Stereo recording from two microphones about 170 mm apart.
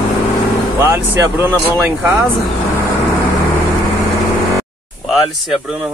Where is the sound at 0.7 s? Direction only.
15° right (ahead or behind).